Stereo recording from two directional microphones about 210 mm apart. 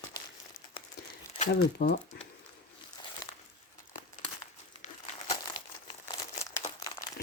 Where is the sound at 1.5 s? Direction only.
50° left (ahead or behind).